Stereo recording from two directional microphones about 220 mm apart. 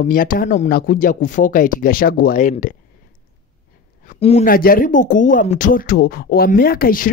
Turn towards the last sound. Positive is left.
turn(degrees=40)  # may be behind; listen again after turning